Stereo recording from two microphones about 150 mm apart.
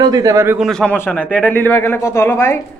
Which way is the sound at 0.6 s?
5° left (ahead or behind).